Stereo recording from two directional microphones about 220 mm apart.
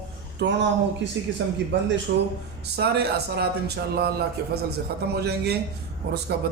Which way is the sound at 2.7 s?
50° right (ahead or behind).